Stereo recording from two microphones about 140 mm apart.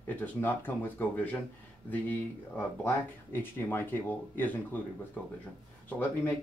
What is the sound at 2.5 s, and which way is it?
Speech, 15° left (ahead or behind).